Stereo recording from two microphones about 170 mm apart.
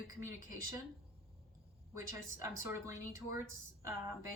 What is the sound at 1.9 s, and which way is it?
A woman's voice, 15° right (ahead or behind).